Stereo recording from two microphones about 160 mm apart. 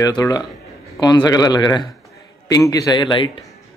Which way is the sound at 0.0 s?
20° left (ahead or behind).